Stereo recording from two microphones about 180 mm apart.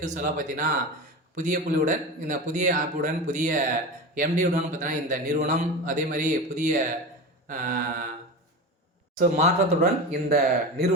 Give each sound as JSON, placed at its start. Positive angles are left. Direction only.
{"t": 0.0, "sound": "a man's voice", "side_deg": -45}
{"t": 9.1, "sound": "speech", "side_deg": -40}
{"t": 10.2, "sound": "speech", "side_deg": -60}